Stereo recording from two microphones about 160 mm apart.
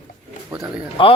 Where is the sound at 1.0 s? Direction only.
30° left (ahead or behind).